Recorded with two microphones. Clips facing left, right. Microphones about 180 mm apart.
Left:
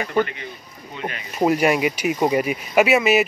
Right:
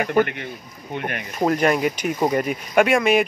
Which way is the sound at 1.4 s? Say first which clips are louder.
Left 1 dB; 10° left (ahead or behind).